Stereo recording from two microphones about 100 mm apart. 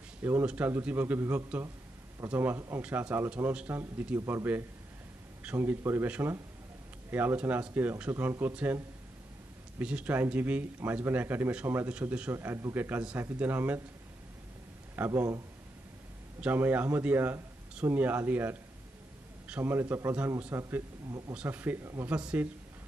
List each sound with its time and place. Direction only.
0.2 s speech: 20° right (ahead or behind)
9.8 s speech: 15° right (ahead or behind)
15.0 s speech: 25° right (ahead or behind)
16.3 s speech: 20° right (ahead or behind)